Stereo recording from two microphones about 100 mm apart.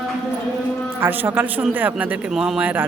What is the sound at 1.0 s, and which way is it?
Speech, 20° right (ahead or behind).